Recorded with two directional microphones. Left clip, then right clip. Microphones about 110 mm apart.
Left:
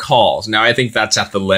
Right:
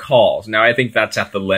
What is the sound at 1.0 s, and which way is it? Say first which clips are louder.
Speech: left 3 dB; 25° left (ahead or behind).